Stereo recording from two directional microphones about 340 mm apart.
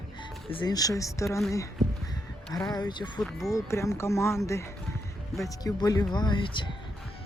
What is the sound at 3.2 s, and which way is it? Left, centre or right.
Speech, centre.